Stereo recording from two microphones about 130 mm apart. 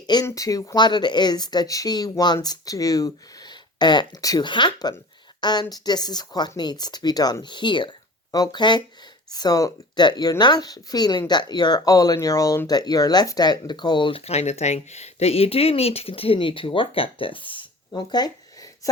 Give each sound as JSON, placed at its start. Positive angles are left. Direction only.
{"t": 0.0, "sound": "speech", "side_deg": 35}